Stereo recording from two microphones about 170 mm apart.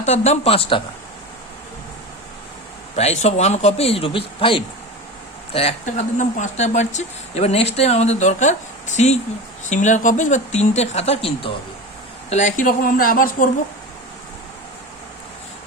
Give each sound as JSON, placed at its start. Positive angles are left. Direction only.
{"t": 0.0, "sound": "speech", "side_deg": 40}
{"t": 2.9, "sound": "speech", "side_deg": 40}
{"t": 9.6, "sound": "speech", "side_deg": 45}